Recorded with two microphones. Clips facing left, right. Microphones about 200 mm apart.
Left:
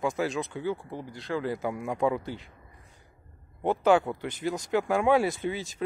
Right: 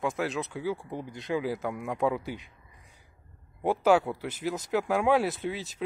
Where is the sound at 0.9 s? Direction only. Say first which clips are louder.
Right 1 dB; 20° right (ahead or behind).